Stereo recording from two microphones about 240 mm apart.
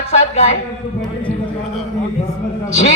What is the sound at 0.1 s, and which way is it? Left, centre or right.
Speech, left.